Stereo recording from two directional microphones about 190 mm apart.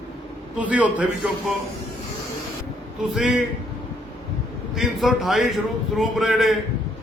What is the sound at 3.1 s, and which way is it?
Speech, centre (ahead or behind).